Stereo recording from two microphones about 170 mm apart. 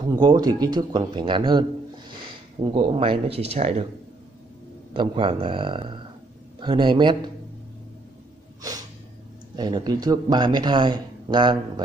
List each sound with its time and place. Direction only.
0.0 s speech: 25° right (ahead or behind)
4.9 s speech: 30° right (ahead or behind)
8.6 s snort: 20° right (ahead or behind)
9.6 s speech: 25° right (ahead or behind)